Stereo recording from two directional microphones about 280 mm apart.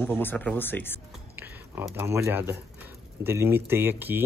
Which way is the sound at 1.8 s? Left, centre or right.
Centre.